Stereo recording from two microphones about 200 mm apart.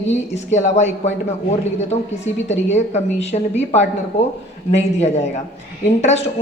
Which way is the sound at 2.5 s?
35° left (ahead or behind).